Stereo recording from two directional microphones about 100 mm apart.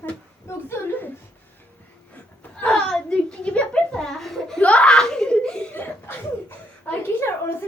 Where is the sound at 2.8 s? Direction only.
5° left (ahead or behind); by 7.5 s 25° left (ahead or behind).